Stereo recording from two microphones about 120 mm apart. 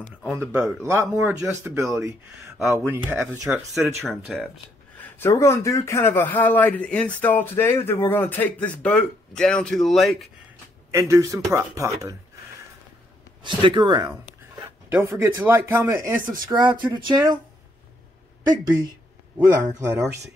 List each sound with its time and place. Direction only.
0.6 s speech: centre (ahead or behind)
0.8 s speech: 25° right (ahead or behind)
2.7 s speech: 15° right (ahead or behind)
3.5 s speech: 5° right (ahead or behind)
5.0 s speech: 20° left (ahead or behind); by 10.3 s centre (ahead or behind)
10.9 s speech: 25° right (ahead or behind)
13.4 s speech: 45° right (ahead or behind)
14.9 s speech: 15° right (ahead or behind); by 17.4 s 40° right (ahead or behind)
19.3 s speech: 10° right (ahead or behind)